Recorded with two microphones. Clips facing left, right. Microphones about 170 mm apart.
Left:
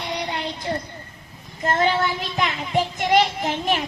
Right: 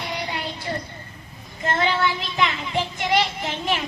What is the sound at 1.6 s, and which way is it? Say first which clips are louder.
Child singing: left 2 dB; 45° left (ahead or behind).